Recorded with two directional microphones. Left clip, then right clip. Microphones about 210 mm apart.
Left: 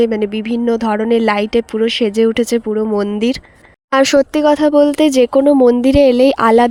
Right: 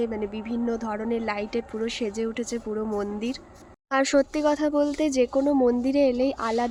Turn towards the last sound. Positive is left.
turn(degrees=45)  # may be behind; listen again after turning